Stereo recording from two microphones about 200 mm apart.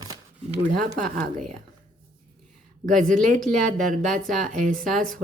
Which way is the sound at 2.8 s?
40° right (ahead or behind).